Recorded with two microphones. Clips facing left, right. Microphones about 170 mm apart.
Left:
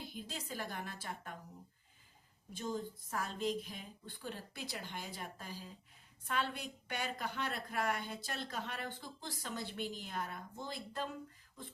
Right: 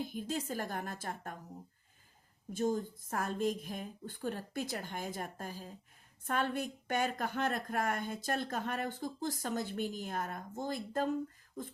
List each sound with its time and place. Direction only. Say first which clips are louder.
0.0 s a woman's voice: right 9 dB; 45° right (ahead or behind)
2.5 s a woman's voice: right 7 dB; 45° right (ahead or behind)